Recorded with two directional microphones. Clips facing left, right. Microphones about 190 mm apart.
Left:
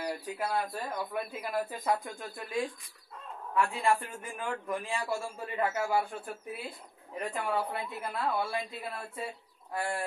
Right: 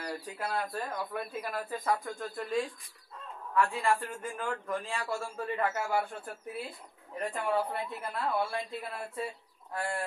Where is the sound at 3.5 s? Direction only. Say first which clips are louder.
Even; 15° left (ahead or behind).